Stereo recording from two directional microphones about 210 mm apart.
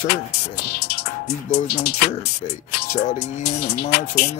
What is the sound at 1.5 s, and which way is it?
Speech, 50° left (ahead or behind).